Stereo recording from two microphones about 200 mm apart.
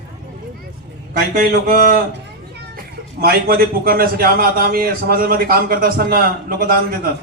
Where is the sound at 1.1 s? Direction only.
50° right (ahead or behind).